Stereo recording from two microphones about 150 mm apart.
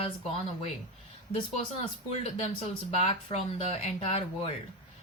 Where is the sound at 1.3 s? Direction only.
35° left (ahead or behind).